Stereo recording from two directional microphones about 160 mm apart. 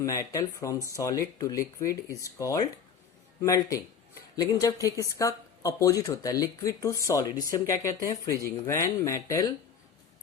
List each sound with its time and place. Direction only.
0.0 s speech: 20° left (ahead or behind)